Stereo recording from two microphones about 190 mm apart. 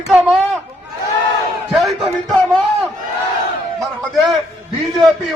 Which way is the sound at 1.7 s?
Centre (ahead or behind).